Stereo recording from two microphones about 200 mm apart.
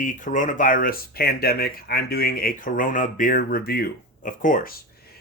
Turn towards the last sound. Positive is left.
turn(degrees=40)  # may be behind; listen again after turning